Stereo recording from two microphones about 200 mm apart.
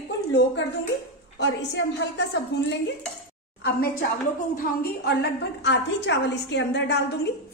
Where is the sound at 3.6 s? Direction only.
50° left (ahead or behind).